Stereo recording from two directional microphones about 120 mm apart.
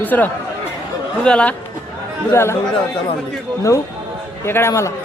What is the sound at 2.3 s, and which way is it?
Speech, 20° left (ahead or behind).